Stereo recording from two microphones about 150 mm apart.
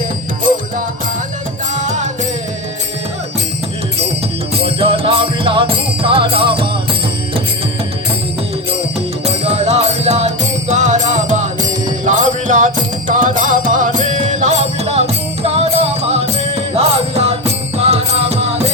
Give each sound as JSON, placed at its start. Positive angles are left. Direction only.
{"t": 4.5, "sound": "music", "side_deg": -40}
{"t": 9.2, "sound": "music", "side_deg": -45}